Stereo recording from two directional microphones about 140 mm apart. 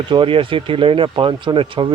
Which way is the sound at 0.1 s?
40° right (ahead or behind).